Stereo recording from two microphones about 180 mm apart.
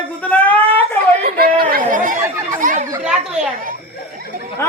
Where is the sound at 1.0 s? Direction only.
55° right (ahead or behind).